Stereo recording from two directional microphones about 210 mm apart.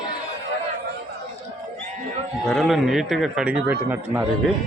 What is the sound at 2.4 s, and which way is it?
A man's voice, centre (ahead or behind).